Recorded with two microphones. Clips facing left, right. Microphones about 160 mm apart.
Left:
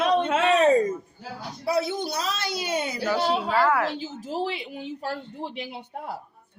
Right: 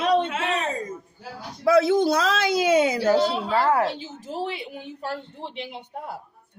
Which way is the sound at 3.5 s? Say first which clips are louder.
Right 3 dB; 30° right (ahead or behind).